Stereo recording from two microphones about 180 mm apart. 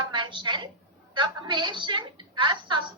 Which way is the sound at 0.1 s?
25° right (ahead or behind).